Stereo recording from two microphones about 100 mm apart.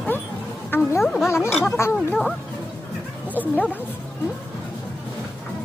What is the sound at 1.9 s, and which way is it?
Speech, 5° left (ahead or behind).